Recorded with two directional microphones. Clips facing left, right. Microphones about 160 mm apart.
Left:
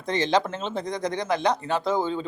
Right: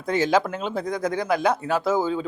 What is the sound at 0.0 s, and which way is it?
Speech, 5° right (ahead or behind).